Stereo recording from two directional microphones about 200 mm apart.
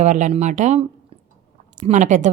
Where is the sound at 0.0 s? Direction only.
35° right (ahead or behind).